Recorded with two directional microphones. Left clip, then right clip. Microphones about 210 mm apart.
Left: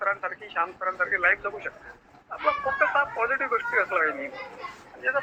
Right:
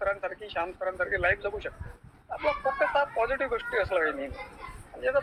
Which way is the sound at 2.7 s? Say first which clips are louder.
Left 2 dB; 40° right (ahead or behind).